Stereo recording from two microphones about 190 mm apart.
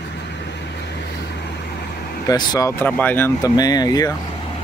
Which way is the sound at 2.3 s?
20° left (ahead or behind).